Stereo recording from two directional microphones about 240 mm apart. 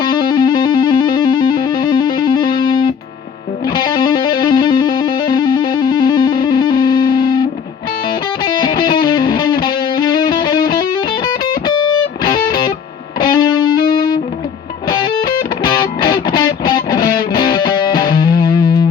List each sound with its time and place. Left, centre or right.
0.1 s music: centre
3.7 s music: centre
8.6 s music: centre
13.1 s music: centre
15.6 s music: centre